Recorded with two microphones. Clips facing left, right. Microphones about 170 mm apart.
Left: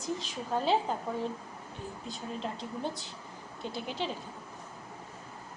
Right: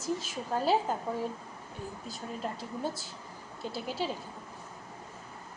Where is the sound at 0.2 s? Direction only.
5° right (ahead or behind).